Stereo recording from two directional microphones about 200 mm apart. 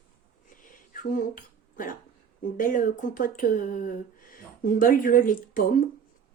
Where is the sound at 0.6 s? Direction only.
40° left (ahead or behind).